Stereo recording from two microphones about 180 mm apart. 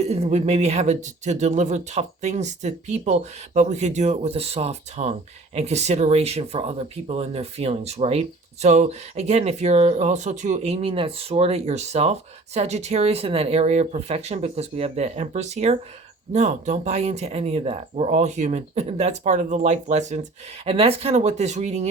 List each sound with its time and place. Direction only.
0.0 s speech: 35° right (ahead or behind)